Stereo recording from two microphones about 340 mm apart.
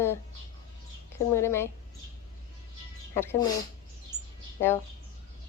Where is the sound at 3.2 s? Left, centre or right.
Centre.